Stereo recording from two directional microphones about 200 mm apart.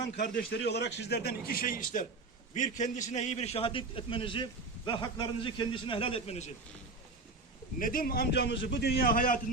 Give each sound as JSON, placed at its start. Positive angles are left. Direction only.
{"t": 0.2, "sound": "a man's voice", "side_deg": 50}
{"t": 7.8, "sound": "a man's voice", "side_deg": 45}